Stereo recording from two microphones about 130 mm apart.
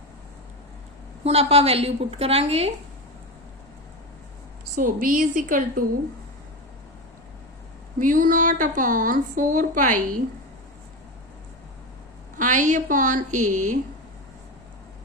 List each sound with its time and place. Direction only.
1.2 s a woman's voice: 50° right (ahead or behind)
4.8 s a woman's voice: 90° right
7.9 s a woman's voice: 90° right
12.4 s a woman's voice: 75° right (ahead or behind)